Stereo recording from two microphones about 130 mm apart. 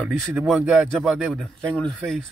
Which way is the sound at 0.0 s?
5° right (ahead or behind).